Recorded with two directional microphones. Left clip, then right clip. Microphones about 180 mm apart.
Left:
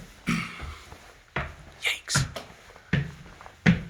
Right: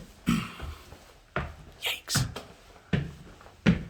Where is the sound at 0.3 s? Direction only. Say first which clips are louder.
Left 1 dB; 50° right (ahead or behind).